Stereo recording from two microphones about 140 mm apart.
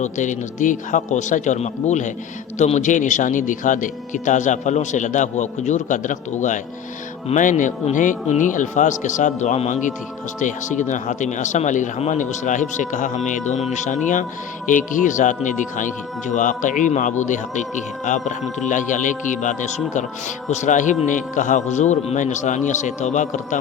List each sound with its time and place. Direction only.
0.0 s speech: 60° left (ahead or behind)